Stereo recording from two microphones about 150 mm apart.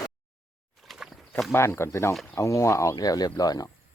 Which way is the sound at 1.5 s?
15° left (ahead or behind).